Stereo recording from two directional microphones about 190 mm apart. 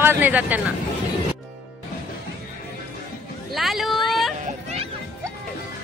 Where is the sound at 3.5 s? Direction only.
Centre (ahead or behind).